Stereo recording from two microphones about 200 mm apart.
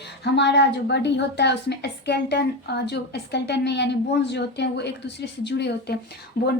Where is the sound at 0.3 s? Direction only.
60° left (ahead or behind).